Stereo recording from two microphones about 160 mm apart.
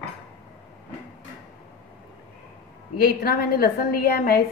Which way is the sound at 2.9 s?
70° left (ahead or behind).